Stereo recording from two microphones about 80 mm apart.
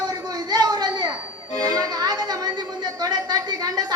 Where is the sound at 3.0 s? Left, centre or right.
Right.